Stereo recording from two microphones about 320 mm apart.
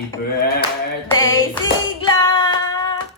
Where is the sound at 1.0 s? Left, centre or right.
Centre.